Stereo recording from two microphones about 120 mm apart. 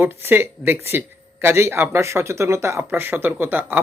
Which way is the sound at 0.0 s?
20° right (ahead or behind).